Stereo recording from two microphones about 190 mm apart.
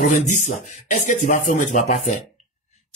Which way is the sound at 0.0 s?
40° left (ahead or behind).